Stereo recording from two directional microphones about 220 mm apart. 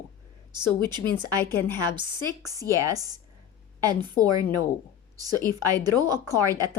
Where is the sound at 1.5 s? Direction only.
10° left (ahead or behind).